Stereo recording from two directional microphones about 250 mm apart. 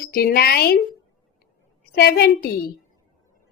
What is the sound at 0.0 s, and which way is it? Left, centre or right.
Speech, left.